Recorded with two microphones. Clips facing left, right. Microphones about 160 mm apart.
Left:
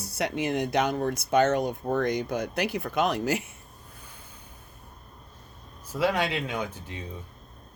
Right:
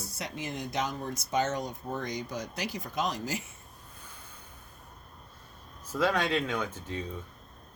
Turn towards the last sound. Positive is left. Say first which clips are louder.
# even
turn(degrees=15)  # may be behind; listen again after turning